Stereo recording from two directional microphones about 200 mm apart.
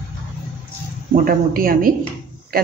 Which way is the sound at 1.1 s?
45° right (ahead or behind).